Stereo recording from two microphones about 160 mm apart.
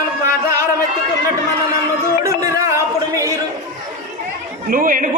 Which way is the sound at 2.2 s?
20° right (ahead or behind).